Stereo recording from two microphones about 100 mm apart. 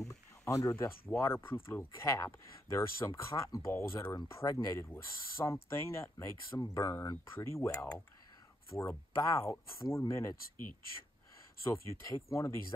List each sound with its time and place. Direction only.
0.1 s speech: 30° left (ahead or behind)
11.6 s speech: 30° left (ahead or behind)